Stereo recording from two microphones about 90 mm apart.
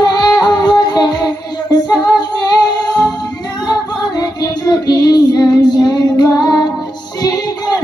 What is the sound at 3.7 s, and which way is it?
Child singing, 45° left (ahead or behind).